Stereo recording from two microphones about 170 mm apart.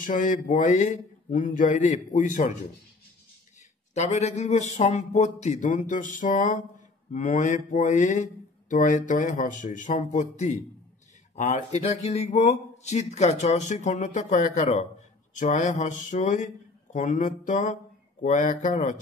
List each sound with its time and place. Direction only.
0.0 s speech: 50° left (ahead or behind)
3.9 s speech: 40° left (ahead or behind)